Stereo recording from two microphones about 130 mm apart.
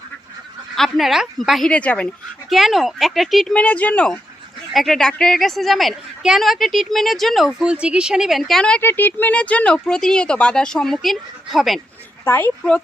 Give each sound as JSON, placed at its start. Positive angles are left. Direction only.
{"t": 0.8, "sound": "a woman's voice", "side_deg": 0}
{"t": 2.5, "sound": "a woman's voice", "side_deg": 0}
{"t": 12.2, "sound": "speech", "side_deg": 15}